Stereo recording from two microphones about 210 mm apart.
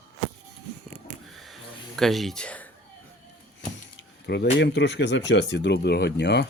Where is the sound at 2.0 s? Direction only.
Centre (ahead or behind).